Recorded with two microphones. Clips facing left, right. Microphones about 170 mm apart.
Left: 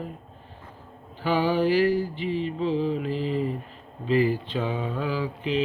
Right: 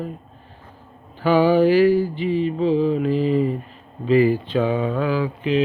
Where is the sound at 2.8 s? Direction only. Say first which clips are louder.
Right 7 dB; 55° right (ahead or behind).